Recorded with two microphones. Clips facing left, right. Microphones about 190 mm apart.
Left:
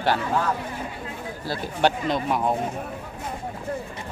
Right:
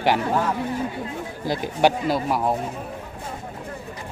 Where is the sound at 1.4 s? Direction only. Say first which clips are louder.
Right 3 dB; 15° right (ahead or behind).